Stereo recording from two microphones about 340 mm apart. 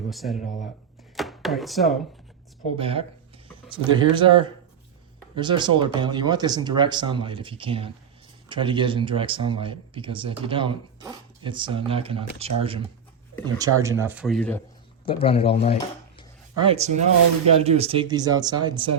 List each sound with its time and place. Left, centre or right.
0.1 s speech: centre
0.4 s speech: left
1.1 s chopping: centre
2.7 s speech: centre
15.0 s speech: centre
16.6 s speech: centre